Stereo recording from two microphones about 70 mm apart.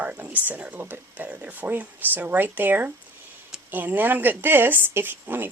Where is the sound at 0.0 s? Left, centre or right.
Right.